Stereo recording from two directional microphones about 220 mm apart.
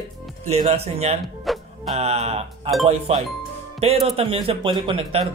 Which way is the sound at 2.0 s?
30° right (ahead or behind).